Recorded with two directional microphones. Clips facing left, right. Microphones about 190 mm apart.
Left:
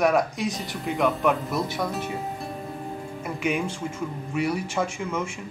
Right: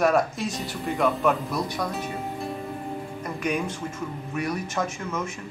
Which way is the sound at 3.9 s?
10° left (ahead or behind).